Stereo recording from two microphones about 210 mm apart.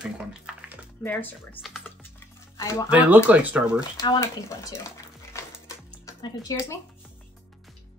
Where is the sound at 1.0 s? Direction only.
10° left (ahead or behind).